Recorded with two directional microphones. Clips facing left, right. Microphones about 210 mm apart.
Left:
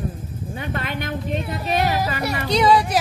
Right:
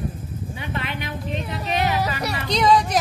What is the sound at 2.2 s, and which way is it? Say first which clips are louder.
Speech: left 2 dB; 10° left (ahead or behind).